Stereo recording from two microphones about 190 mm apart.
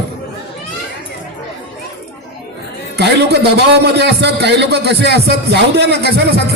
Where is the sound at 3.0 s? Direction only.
60° right (ahead or behind).